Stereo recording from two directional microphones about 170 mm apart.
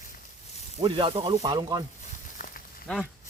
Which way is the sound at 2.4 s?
55° left (ahead or behind).